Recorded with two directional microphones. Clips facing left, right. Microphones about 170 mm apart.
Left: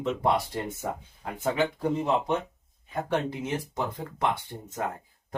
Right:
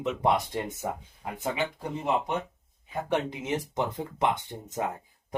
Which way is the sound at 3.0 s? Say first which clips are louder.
Right 1 dB; 20° right (ahead or behind).